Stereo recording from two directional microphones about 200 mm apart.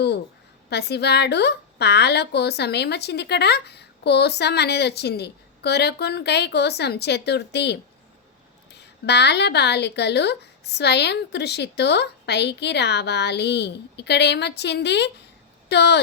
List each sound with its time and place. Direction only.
0.7 s a woman's voice: 55° left (ahead or behind)